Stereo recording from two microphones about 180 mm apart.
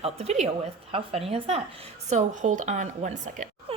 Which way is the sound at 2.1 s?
45° right (ahead or behind).